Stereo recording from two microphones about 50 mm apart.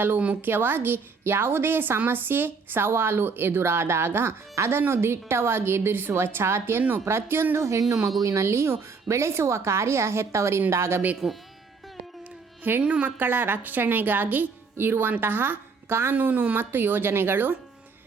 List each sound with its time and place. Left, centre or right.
0.4 s a woman's voice: right
4.5 s a woman's voice: right
7.5 s a woman's voice: right
11.2 s speech: centre
12.8 s a woman's voice: right
13.1 s a woman's voice: right
16.1 s a woman's voice: right